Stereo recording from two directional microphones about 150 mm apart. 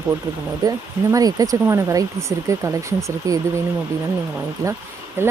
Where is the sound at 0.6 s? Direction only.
25° right (ahead or behind).